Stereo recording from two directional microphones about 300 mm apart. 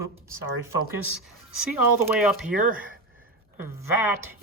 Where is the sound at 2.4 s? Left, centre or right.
Right.